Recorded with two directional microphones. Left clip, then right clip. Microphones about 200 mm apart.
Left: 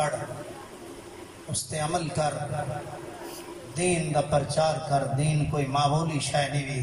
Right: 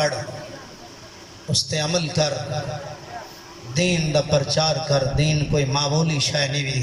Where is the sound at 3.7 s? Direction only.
45° right (ahead or behind).